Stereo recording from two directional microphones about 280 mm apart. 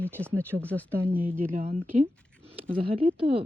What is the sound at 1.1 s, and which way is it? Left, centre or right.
Speech, centre.